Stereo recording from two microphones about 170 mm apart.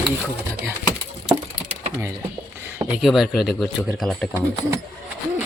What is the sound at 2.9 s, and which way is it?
Speech, 5° right (ahead or behind).